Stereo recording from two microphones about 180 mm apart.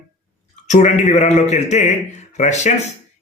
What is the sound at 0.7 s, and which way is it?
A man's voice, 40° left (ahead or behind).